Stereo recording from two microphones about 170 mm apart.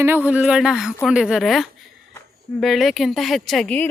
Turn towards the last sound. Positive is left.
turn(degrees=5)  # may be behind; listen again after turning